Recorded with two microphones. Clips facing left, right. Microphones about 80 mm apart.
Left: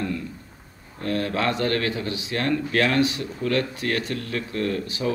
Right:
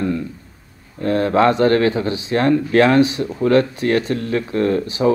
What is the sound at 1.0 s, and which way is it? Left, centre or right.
Speech, right.